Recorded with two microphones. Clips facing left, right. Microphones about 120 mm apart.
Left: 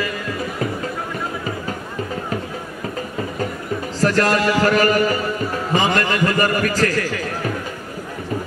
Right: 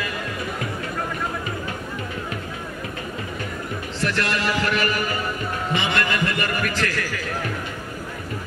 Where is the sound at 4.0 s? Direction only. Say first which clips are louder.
Left 8 dB; 40° left (ahead or behind).